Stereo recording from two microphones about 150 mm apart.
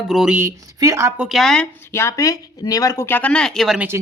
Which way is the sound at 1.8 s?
15° left (ahead or behind).